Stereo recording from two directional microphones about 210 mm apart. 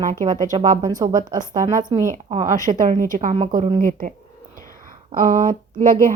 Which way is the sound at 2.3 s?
35° right (ahead or behind).